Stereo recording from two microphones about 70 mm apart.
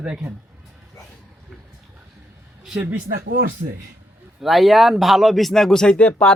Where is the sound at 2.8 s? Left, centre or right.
Right.